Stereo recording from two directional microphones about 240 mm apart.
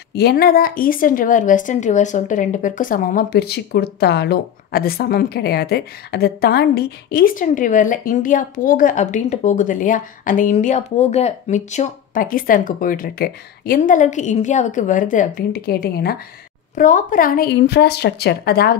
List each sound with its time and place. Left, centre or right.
0.1 s a woman's voice: left